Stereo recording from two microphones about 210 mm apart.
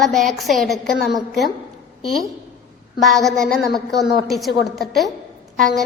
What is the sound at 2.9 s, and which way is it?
A woman's voice, centre (ahead or behind).